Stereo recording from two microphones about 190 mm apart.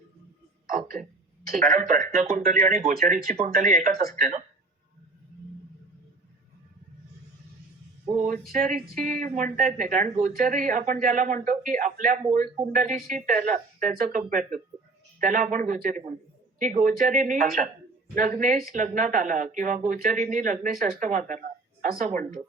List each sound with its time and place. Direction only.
1.5 s speech: 45° right (ahead or behind)
8.5 s speech: 45° right (ahead or behind)